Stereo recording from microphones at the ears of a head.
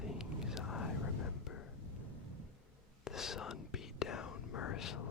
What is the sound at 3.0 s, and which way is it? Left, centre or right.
Whispering, left.